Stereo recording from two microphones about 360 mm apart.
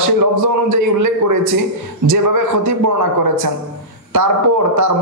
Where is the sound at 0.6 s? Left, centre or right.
Right.